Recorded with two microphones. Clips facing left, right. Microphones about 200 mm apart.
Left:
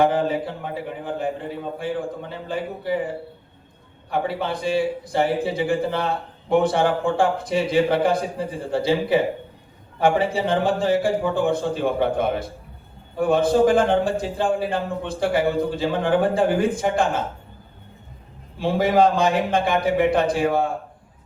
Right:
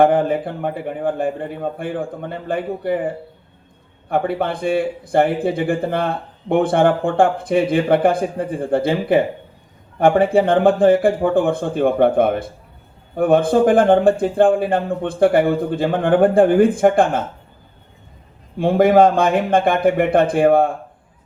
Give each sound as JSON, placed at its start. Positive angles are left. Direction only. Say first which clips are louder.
{"t": 0.0, "sound": "a man's voice", "louder": "right 5 dB", "side_deg": -55}
{"t": 4.1, "sound": "a man's voice", "louder": "right 5 dB", "side_deg": -55}
{"t": 18.5, "sound": "a man's voice", "louder": "right 6 dB", "side_deg": -55}